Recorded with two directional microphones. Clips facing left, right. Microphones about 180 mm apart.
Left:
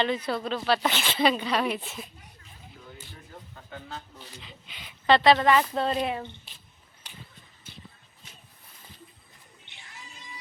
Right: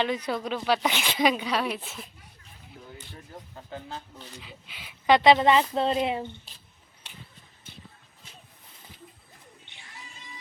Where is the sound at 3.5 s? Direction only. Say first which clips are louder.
Right 2 dB; 30° right (ahead or behind).